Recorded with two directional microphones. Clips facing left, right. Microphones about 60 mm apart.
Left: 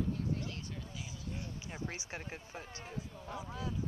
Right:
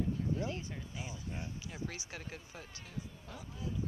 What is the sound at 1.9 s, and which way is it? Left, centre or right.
Speech, left.